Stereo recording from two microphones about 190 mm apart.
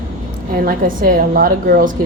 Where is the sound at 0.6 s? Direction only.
45° right (ahead or behind).